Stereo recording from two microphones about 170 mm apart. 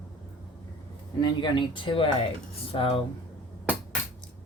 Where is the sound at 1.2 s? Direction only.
25° left (ahead or behind).